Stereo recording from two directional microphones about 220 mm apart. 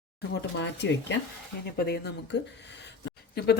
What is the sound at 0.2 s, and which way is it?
A woman's voice, 50° left (ahead or behind).